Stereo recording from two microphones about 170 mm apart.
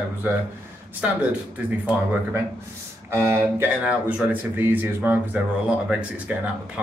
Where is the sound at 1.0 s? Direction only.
5° right (ahead or behind).